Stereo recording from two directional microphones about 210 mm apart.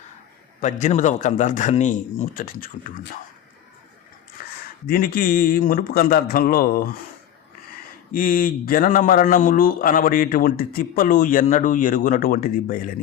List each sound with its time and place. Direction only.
0.6 s a man's voice: 35° left (ahead or behind)
4.4 s a sound: 45° left (ahead or behind)
4.9 s a man's voice: 45° left (ahead or behind)
8.1 s a man's voice: 40° left (ahead or behind)